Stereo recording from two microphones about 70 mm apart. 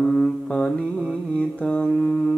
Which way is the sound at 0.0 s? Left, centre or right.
Centre.